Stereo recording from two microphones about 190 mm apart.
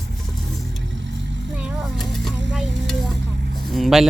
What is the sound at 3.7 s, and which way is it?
Vehicle, centre (ahead or behind).